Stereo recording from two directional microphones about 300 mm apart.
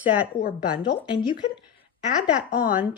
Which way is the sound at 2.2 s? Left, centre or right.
Centre.